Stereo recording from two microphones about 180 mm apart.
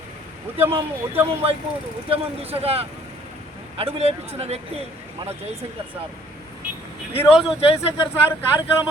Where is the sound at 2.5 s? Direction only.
35° right (ahead or behind).